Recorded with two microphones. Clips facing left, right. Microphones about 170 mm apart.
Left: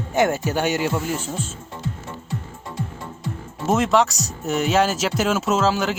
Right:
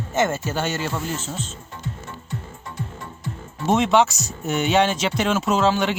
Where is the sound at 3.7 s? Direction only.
Centre (ahead or behind).